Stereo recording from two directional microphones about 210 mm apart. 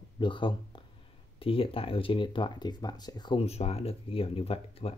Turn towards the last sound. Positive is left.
turn(degrees=25)  # may be behind; listen again after turning